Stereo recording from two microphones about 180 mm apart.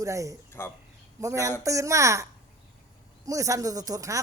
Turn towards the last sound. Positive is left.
turn(degrees=-20)  # may be behind; listen again after turning